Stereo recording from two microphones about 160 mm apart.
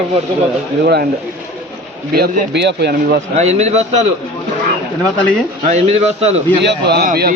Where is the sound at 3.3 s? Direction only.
45° right (ahead or behind).